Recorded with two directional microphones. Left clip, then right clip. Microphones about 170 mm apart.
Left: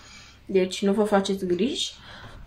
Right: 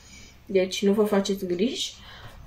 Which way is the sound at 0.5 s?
35° left (ahead or behind).